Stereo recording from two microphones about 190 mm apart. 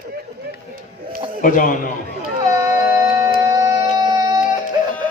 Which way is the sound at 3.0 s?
20° right (ahead or behind).